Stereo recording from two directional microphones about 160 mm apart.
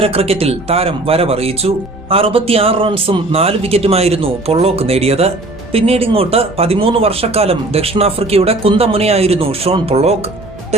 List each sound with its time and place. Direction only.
0.0 s speech: 35° right (ahead or behind)